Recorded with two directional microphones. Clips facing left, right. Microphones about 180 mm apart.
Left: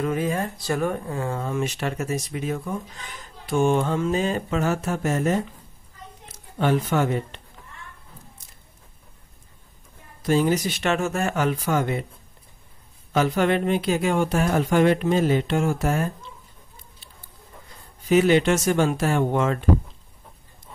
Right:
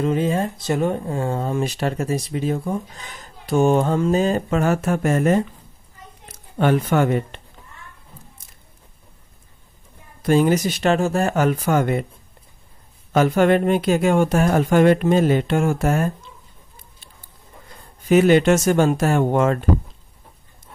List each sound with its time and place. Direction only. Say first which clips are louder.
0.0 s speech: right 4 dB; 25° right (ahead or behind); by 5.4 s 60° right (ahead or behind)
6.6 s speech: right 4 dB; 60° right (ahead or behind)
10.2 s speech: right 4 dB; 55° right (ahead or behind)
13.1 s speech: right 5 dB; 50° right (ahead or behind)
18.0 s speech: right 4 dB; 50° right (ahead or behind)